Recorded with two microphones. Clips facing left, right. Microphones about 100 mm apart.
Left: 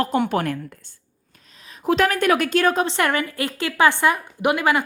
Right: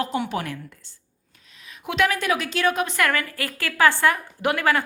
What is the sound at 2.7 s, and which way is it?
A woman's voice, 30° left (ahead or behind).